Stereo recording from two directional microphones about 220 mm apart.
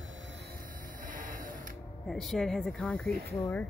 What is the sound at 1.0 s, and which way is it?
Music, 35° right (ahead or behind).